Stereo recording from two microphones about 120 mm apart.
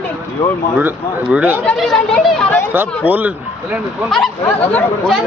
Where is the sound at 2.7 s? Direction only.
15° right (ahead or behind).